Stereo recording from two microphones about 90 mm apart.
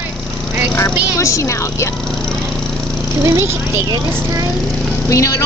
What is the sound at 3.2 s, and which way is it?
Speech, 30° right (ahead or behind).